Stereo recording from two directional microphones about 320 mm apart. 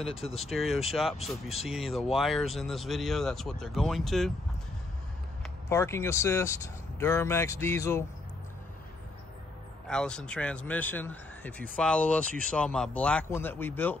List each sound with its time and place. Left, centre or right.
0.2 s speech: centre
0.5 s speech: centre
5.4 s speech: centre
9.8 s speech: centre